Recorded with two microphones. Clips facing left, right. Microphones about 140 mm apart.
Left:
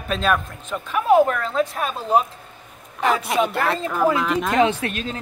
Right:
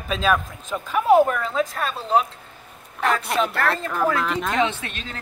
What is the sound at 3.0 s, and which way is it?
Speech, centre (ahead or behind).